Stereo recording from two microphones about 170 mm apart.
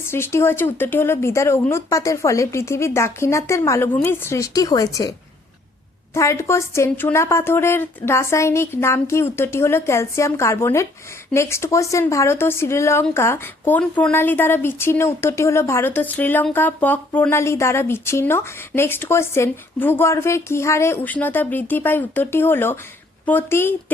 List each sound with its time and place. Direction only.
0.1 s a woman's voice: 15° left (ahead or behind)
6.1 s a woman's voice: 15° left (ahead or behind)